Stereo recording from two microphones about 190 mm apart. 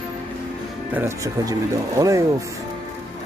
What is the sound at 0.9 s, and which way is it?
Speech, 15° right (ahead or behind).